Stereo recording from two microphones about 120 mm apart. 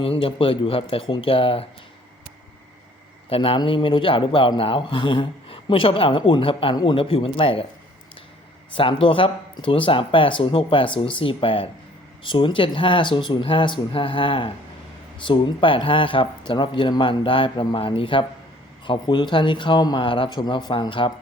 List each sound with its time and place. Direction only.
0.0 s a man's voice: 50° left (ahead or behind)
3.2 s a man's voice: 50° left (ahead or behind)
8.7 s a man's voice: 45° left (ahead or behind)